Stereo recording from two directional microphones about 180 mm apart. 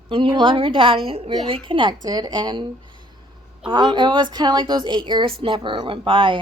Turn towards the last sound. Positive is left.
turn(degrees=-30)  # may be behind; listen again after turning